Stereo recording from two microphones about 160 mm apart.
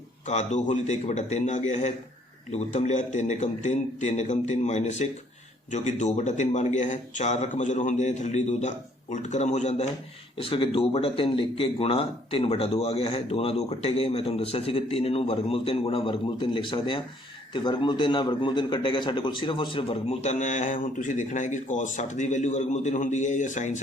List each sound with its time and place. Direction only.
0.3 s a man's voice: 45° left (ahead or behind)
10.3 s a man's voice: 35° left (ahead or behind)